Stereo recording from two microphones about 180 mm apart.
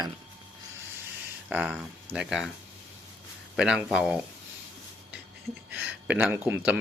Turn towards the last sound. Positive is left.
turn(degrees=-10)  # may be behind; listen again after turning